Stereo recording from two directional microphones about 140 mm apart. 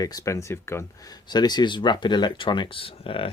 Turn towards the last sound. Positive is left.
turn(degrees=40)  # may be behind; listen again after turning